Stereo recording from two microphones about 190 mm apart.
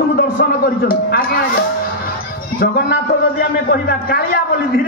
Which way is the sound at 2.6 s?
55° left (ahead or behind).